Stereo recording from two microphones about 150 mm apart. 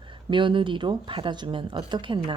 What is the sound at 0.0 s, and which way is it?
A woman's voice, 35° right (ahead or behind).